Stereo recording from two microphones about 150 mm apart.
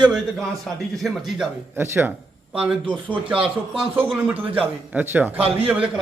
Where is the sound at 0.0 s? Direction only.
Centre (ahead or behind).